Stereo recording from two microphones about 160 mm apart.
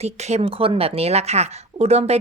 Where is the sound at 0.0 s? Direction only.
40° right (ahead or behind).